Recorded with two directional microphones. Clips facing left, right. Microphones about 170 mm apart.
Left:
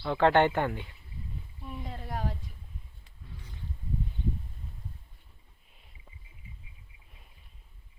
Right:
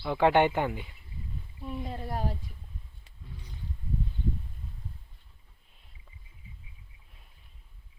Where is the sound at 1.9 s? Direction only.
30° right (ahead or behind).